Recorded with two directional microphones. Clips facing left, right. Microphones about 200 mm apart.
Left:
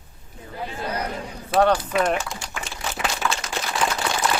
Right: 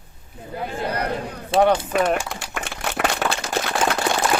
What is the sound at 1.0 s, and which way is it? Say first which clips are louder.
Speech: right 4 dB; 60° right (ahead or behind).